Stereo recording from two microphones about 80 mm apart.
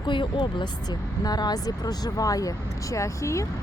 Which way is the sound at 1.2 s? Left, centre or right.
Left.